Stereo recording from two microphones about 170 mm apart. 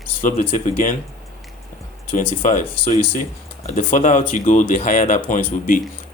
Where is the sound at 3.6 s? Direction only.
45° left (ahead or behind).